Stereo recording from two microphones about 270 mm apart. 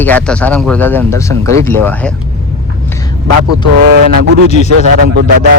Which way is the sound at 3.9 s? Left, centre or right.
Right.